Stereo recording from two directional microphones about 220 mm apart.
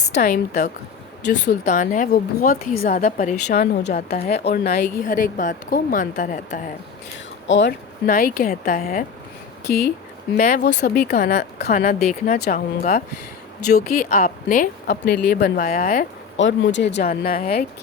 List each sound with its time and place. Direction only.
0.2 s a woman's voice: 45° left (ahead or behind)
3.4 s a woman's voice: 50° left (ahead or behind)
7.4 s speech: 55° left (ahead or behind)
8.0 s a woman's voice: 40° left (ahead or behind)
10.3 s a woman's voice: 40° left (ahead or behind)
14.8 s speech: 50° left (ahead or behind)
16.4 s speech: 55° left (ahead or behind)